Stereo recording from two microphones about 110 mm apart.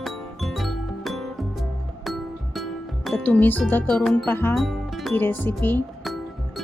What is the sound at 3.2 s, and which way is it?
Speech, 15° left (ahead or behind).